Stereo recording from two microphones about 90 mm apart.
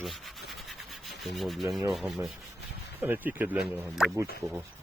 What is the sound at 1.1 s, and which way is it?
Rub, centre (ahead or behind).